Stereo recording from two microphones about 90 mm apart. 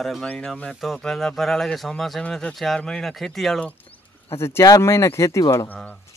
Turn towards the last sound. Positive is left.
turn(degrees=20)  # may be behind; listen again after turning